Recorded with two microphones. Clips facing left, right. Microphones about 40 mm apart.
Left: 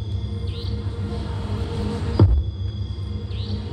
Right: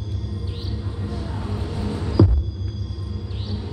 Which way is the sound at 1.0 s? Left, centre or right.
Centre.